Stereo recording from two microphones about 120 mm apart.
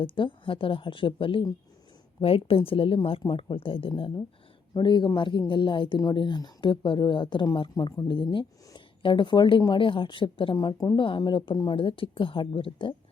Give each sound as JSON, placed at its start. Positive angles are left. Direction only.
{"t": 0.0, "sound": "a woman's voice", "side_deg": 45}
{"t": 10.9, "sound": "a woman's voice", "side_deg": 45}